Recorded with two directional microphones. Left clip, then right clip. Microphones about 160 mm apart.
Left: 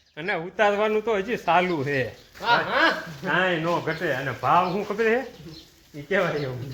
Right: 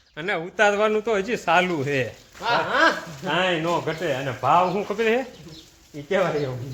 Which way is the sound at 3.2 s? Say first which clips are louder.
Right 1 dB; 15° right (ahead or behind).